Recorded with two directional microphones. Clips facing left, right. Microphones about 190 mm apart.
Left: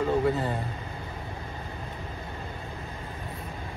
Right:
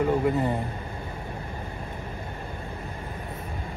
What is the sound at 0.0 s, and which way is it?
Speech, 15° right (ahead or behind).